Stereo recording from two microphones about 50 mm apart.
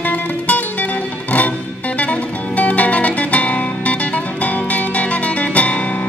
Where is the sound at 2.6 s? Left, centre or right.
Left.